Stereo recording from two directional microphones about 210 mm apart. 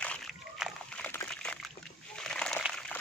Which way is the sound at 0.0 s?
5° left (ahead or behind).